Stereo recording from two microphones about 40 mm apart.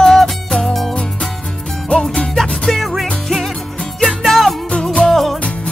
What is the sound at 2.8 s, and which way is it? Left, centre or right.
Music, centre.